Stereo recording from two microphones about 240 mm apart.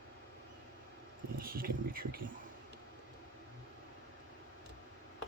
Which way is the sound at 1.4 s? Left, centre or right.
Right.